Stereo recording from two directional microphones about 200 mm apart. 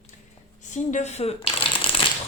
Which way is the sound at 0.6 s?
35° left (ahead or behind).